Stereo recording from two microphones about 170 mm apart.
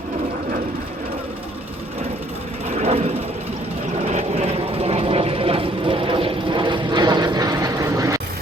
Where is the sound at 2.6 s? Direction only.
40° right (ahead or behind); by 8.2 s 20° right (ahead or behind).